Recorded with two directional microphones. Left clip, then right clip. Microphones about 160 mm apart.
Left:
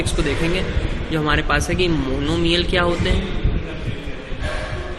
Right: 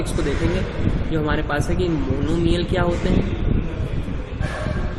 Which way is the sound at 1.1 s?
15° left (ahead or behind).